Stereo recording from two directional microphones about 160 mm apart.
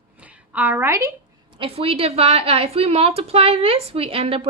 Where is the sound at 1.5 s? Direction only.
35° right (ahead or behind).